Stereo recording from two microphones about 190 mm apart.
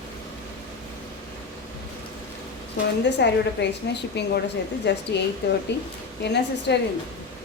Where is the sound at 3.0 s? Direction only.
65° left (ahead or behind).